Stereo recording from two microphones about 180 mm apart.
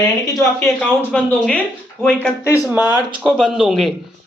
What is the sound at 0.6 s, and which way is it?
Speech, 5° left (ahead or behind).